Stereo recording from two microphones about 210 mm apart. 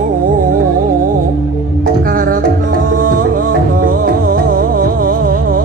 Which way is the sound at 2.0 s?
45° right (ahead or behind).